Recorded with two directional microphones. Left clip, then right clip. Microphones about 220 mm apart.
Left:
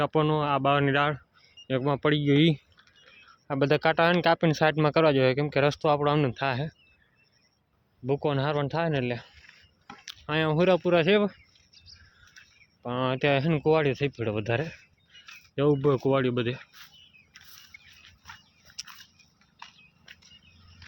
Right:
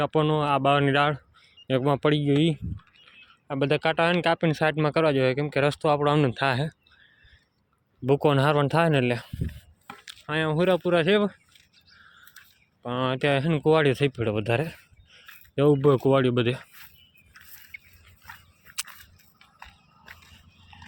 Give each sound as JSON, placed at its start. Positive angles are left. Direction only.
{"t": 0.0, "sound": "speech", "side_deg": -5}
{"t": 2.2, "sound": "speech", "side_deg": 5}
{"t": 8.0, "sound": "speech", "side_deg": -25}
{"t": 10.2, "sound": "speech", "side_deg": 5}
{"t": 12.8, "sound": "speech", "side_deg": 0}
{"t": 17.3, "sound": "squawk", "side_deg": -15}